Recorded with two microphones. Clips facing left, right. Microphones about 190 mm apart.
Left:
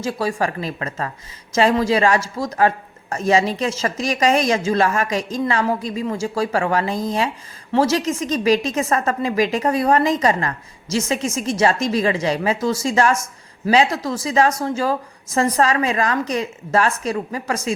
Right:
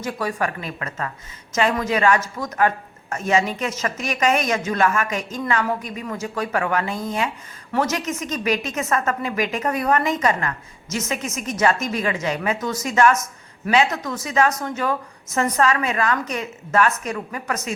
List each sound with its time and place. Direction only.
0.0 s speech: 30° left (ahead or behind)